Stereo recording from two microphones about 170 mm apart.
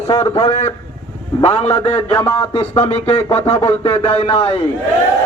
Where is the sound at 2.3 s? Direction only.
35° left (ahead or behind).